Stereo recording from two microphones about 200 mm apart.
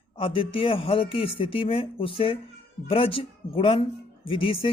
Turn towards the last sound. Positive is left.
turn(degrees=25)  # may be behind; listen again after turning